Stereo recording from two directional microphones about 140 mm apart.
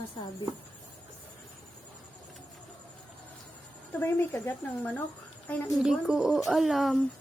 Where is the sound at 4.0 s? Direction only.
20° left (ahead or behind).